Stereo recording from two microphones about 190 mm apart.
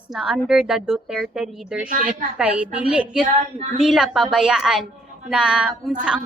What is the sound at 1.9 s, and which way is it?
Speech, 45° right (ahead or behind).